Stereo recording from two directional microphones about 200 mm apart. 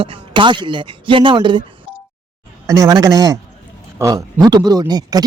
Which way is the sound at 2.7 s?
15° right (ahead or behind).